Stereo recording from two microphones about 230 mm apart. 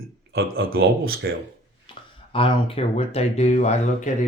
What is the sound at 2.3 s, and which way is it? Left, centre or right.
Speech, left.